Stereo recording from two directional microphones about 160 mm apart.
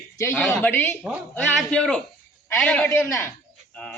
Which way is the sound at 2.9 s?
20° left (ahead or behind).